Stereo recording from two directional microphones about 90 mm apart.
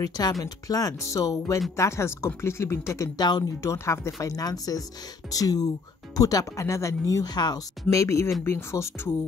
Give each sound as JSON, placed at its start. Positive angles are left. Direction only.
{"t": 0.0, "sound": "speech", "side_deg": 45}
{"t": 3.2, "sound": "speech", "side_deg": 50}
{"t": 3.6, "sound": "speech", "side_deg": 30}